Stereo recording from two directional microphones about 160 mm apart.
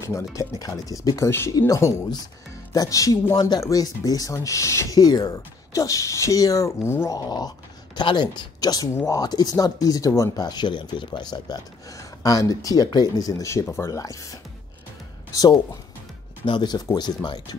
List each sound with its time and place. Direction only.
0.0 s speech: 20° left (ahead or behind)
15.3 s speech: 25° left (ahead or behind)